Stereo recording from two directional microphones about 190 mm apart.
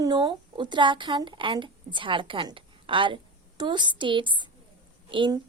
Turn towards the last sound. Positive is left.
turn(degrees=-25)  # may be behind; listen again after turning